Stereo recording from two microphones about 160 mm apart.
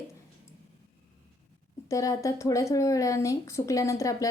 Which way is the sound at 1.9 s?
20° left (ahead or behind).